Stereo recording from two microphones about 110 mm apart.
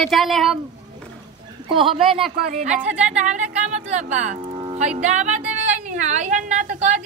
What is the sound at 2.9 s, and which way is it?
Speech, 10° right (ahead or behind).